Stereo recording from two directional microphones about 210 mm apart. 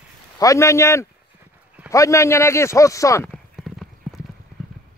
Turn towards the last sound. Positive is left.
turn(degrees=0)  # may be behind; listen again after turning